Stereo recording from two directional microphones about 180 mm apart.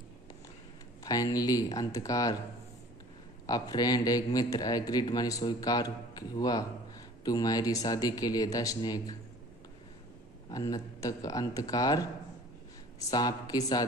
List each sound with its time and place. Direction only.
1.0 s a man's voice: 20° left (ahead or behind)
3.4 s a man's voice: 20° left (ahead or behind)
10.5 s a man's voice: 20° left (ahead or behind)
13.1 s a man's voice: 20° left (ahead or behind)